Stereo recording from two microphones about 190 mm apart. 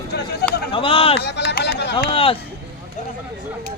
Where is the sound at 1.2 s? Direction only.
65° left (ahead or behind).